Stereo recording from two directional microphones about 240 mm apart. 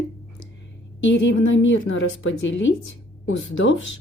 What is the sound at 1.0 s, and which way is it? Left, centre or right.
A woman's voice, left.